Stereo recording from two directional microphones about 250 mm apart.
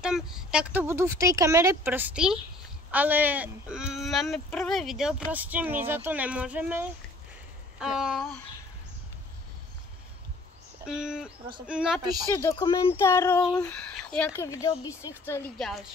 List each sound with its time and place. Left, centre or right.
0.0 s speech: centre
10.9 s speech: centre
12.0 s speech: centre
12.4 s speech: centre